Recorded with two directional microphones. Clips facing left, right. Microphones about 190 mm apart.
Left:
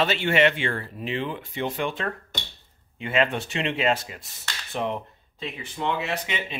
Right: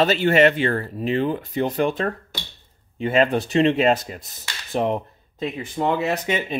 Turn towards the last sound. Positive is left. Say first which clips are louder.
# right 7 dB
turn(degrees=-45)  # may be behind; listen again after turning